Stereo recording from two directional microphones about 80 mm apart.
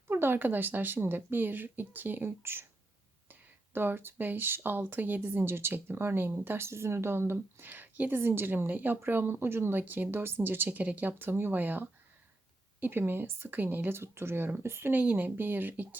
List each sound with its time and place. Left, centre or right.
0.1 s speech: right